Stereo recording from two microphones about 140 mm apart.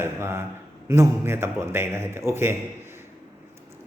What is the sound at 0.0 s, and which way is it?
Speech, 15° right (ahead or behind).